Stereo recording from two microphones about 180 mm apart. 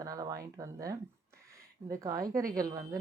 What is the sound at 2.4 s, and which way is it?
Speech, 50° right (ahead or behind).